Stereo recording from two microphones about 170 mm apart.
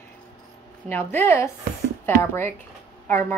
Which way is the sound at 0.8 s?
15° left (ahead or behind).